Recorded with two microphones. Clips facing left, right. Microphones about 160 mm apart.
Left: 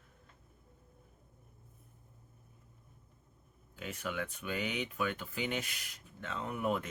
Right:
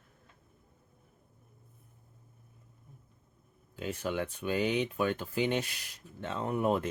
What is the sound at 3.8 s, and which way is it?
Speech, 30° right (ahead or behind).